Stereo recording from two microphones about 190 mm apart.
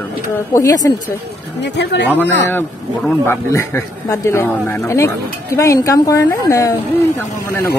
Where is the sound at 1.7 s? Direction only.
65° left (ahead or behind).